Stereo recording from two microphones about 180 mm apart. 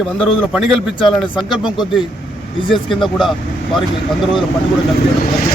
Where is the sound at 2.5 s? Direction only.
30° left (ahead or behind).